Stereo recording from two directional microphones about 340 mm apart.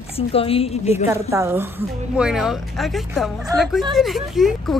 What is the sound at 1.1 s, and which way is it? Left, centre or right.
Speech, centre.